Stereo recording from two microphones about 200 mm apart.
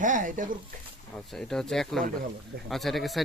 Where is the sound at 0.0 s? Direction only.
40° right (ahead or behind).